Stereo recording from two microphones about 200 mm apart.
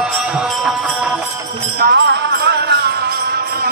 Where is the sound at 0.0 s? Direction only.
5° right (ahead or behind).